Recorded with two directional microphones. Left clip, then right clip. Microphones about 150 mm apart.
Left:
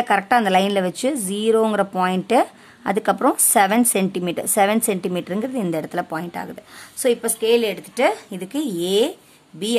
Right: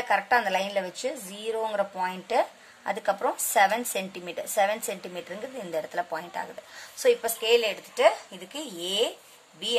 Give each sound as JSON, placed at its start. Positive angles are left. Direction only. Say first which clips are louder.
{"t": 0.1, "sound": "a woman's voice", "louder": "left 6 dB", "side_deg": 55}
{"t": 8.5, "sound": "speech", "louder": "left 9 dB", "side_deg": 65}